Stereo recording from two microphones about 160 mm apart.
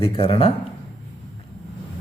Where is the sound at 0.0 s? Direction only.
35° left (ahead or behind).